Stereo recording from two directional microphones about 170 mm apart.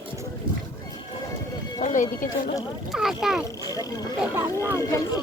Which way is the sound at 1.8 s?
45° left (ahead or behind).